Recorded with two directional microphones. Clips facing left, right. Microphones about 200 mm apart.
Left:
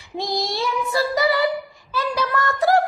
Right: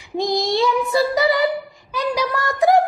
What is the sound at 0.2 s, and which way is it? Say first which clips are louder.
Child singing: right 6 dB; 20° right (ahead or behind).